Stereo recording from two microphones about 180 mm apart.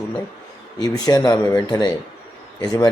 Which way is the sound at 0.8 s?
20° left (ahead or behind).